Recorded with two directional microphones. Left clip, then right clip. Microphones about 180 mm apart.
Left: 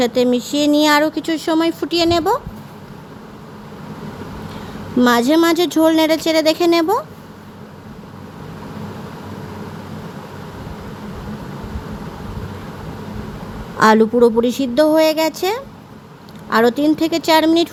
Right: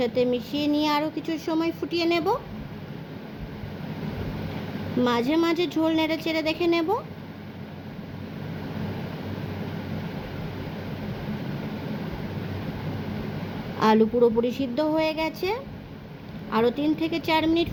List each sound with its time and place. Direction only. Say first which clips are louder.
0.0 s speech: left 8 dB; 35° left (ahead or behind)
4.9 s speech: left 10 dB; 40° left (ahead or behind)
13.7 s speech: left 8 dB; 35° left (ahead or behind)